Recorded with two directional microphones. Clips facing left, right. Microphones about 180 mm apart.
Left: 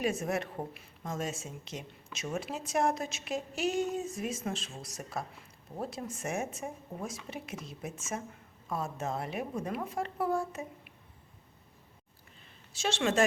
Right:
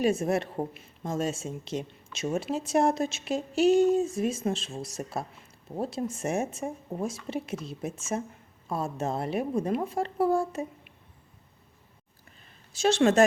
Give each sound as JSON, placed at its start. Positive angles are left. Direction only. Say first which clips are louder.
{"t": 0.0, "sound": "a woman's voice", "louder": "right 6 dB", "side_deg": -30}
{"t": 12.7, "sound": "a woman's voice", "louder": "right 8 dB", "side_deg": -40}